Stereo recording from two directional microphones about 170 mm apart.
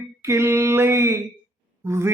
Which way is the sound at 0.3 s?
15° right (ahead or behind).